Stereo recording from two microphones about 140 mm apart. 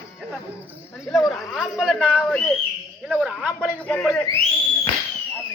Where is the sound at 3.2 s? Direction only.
5° right (ahead or behind).